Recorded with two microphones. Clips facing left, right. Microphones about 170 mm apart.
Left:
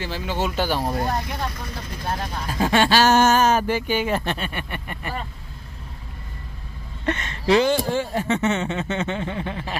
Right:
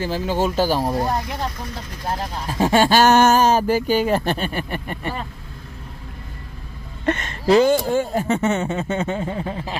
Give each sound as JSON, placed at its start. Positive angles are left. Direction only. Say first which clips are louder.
{"t": 0.0, "sound": "speech", "louder": "right 5 dB", "side_deg": -45}
{"t": 0.8, "sound": "speech", "louder": "right 3 dB", "side_deg": -30}
{"t": 2.7, "sound": "speech", "louder": "right 3 dB", "side_deg": -50}
{"t": 3.3, "sound": "speech", "louder": "right 3 dB", "side_deg": -35}
{"t": 7.1, "sound": "speech", "louder": "right 3 dB", "side_deg": -45}